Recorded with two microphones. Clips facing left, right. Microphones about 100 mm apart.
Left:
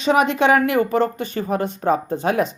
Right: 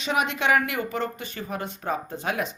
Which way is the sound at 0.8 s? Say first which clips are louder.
Left 10 dB; 50° left (ahead or behind).